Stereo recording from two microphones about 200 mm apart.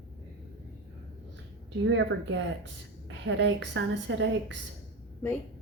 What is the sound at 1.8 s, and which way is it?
A woman's voice, 70° right (ahead or behind).